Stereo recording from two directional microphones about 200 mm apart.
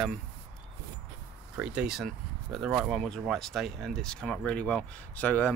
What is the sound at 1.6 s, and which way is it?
Speech, 5° right (ahead or behind).